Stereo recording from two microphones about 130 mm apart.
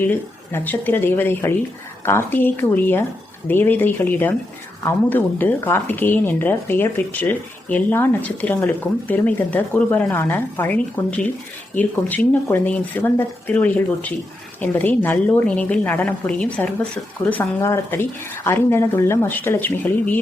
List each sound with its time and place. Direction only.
0.0 s a woman's voice: 15° left (ahead or behind)